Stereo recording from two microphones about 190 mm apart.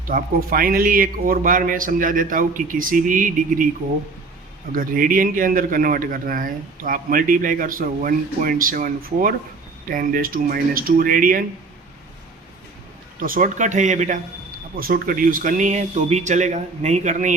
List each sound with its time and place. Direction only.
0.0 s a man's voice: 50° right (ahead or behind)
4.7 s a man's voice: 45° right (ahead or behind)
13.1 s speech: 45° right (ahead or behind)